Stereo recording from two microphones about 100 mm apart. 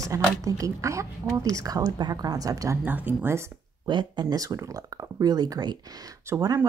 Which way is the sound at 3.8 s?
50° right (ahead or behind).